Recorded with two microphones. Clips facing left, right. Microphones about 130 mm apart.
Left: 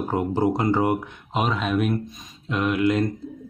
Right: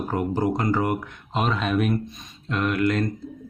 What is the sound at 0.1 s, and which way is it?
Speech, 20° left (ahead or behind).